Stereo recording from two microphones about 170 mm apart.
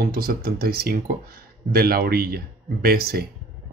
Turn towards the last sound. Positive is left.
turn(degrees=-65)  # may be behind; listen again after turning